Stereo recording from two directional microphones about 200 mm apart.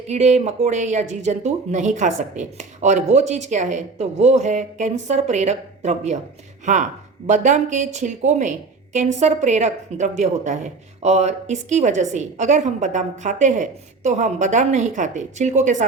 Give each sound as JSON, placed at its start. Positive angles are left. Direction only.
{"t": 0.1, "sound": "a woman's voice", "side_deg": -35}